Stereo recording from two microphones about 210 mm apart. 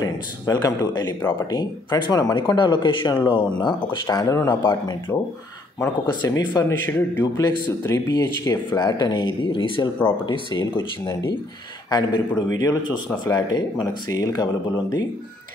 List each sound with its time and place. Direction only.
0.0 s a man's voice: 20° left (ahead or behind)